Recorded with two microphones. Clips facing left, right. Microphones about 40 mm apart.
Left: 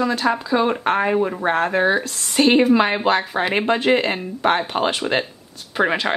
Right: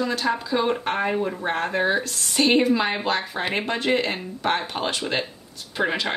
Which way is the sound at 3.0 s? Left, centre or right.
Left.